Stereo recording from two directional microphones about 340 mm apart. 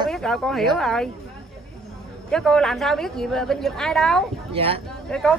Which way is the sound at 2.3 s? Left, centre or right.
Centre.